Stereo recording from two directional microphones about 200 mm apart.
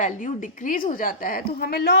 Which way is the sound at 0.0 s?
40° left (ahead or behind).